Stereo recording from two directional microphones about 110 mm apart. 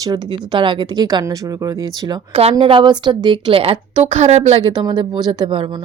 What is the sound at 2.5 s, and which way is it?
A woman's voice, 50° right (ahead or behind).